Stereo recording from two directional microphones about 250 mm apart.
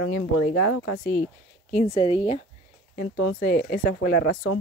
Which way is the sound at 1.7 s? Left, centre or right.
Left.